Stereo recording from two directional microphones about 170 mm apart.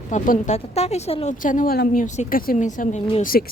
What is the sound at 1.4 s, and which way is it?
Speech, 50° left (ahead or behind).